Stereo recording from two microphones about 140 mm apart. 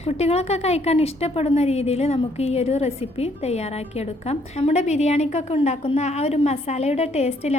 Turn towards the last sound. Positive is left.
turn(degrees=50)  # may be behind; listen again after turning